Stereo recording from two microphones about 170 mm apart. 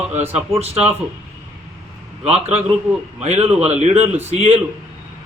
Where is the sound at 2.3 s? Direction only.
35° right (ahead or behind).